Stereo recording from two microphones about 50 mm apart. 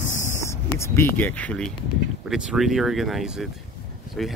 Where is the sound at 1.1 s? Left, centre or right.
Left.